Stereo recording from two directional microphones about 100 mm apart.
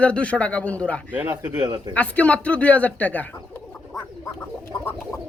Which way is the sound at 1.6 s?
40° right (ahead or behind).